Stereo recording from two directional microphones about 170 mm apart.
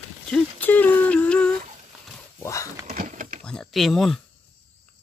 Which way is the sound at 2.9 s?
50° right (ahead or behind).